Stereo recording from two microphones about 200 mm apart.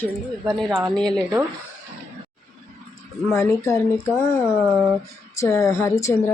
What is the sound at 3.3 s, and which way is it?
Speech, 15° left (ahead or behind).